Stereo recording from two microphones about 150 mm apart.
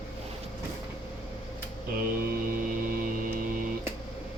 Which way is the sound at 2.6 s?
70° right (ahead or behind).